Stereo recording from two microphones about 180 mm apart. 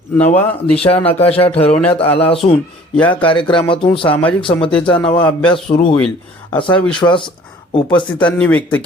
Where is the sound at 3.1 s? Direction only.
25° left (ahead or behind).